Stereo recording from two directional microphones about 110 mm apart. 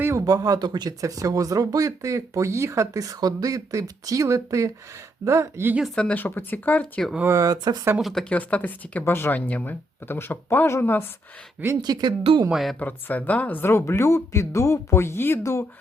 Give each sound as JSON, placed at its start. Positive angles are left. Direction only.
{"t": 0.0, "sound": "speech", "side_deg": -25}
{"t": 5.7, "sound": "speech", "side_deg": 0}
{"t": 6.0, "sound": "speech", "side_deg": 15}
{"t": 7.3, "sound": "speech", "side_deg": -30}
{"t": 7.9, "sound": "speech", "side_deg": 0}
{"t": 8.2, "sound": "speech", "side_deg": 10}
{"t": 11.8, "sound": "speech", "side_deg": -40}
{"t": 12.5, "sound": "speech", "side_deg": 0}
{"t": 12.8, "sound": "speech", "side_deg": 15}